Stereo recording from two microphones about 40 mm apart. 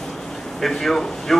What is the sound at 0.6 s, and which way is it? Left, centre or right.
Speech, centre.